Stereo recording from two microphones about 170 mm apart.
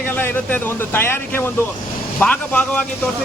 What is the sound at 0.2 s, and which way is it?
Speech, 10° left (ahead or behind).